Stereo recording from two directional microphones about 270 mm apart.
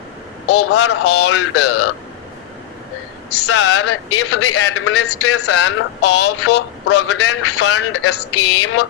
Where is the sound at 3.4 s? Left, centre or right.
Left.